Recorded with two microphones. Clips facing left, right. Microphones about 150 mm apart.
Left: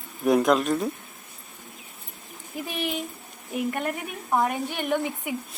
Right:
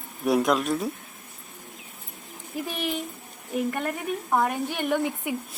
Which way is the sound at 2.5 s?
Centre (ahead or behind).